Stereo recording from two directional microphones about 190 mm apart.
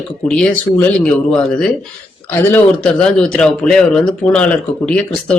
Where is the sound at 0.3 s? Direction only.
5° left (ahead or behind).